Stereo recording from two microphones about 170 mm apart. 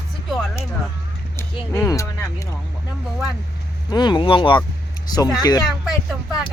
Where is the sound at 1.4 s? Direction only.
15° left (ahead or behind).